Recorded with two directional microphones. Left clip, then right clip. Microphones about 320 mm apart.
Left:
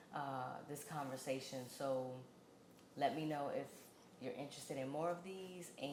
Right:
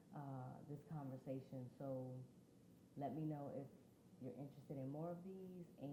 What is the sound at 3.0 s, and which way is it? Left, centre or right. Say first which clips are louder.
Speech: left 9 dB; centre.